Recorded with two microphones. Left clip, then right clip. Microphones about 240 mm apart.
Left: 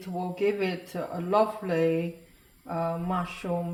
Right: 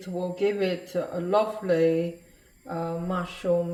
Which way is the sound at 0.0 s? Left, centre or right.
Left.